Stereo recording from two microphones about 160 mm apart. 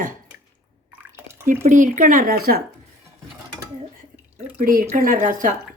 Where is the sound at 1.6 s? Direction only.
50° right (ahead or behind); by 2.6 s 70° right (ahead or behind).